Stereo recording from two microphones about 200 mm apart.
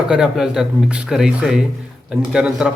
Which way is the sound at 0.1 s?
5° right (ahead or behind).